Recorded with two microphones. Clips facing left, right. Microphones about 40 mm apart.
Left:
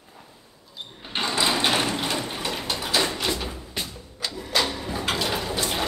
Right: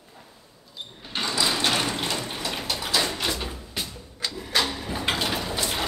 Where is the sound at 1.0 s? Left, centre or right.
Left.